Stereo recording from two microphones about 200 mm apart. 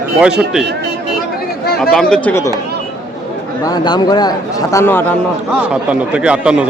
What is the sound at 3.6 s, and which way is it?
A man's voice, 20° left (ahead or behind).